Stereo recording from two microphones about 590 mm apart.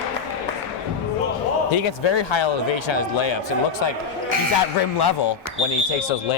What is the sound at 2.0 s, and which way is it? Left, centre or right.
Speech, left.